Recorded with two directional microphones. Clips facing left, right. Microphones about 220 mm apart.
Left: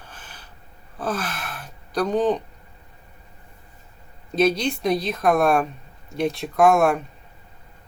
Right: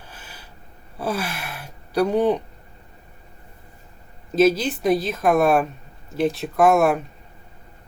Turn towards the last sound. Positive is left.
turn(degrees=0)  # may be behind; listen again after turning